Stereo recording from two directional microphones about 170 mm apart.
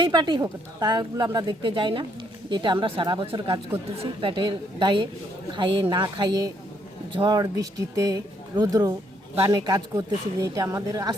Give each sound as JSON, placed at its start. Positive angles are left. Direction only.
{"t": 0.0, "sound": "a woman's voice", "side_deg": -25}